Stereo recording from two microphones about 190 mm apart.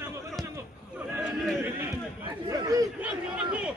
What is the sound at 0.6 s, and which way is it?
Chatter, 10° right (ahead or behind).